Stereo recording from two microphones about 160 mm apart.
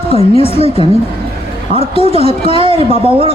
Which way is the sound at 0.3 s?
40° left (ahead or behind).